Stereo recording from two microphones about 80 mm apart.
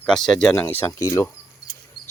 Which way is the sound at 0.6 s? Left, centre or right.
Left.